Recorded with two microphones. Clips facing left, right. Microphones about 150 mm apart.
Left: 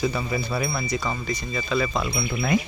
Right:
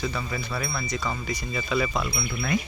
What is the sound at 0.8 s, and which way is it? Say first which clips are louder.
Wind chime: left 3 dB; centre (ahead or behind).